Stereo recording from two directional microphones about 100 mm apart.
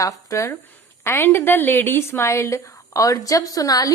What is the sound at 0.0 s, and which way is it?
A woman's voice, 30° left (ahead or behind).